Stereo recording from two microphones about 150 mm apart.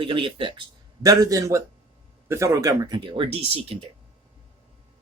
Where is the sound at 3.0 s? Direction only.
35° right (ahead or behind).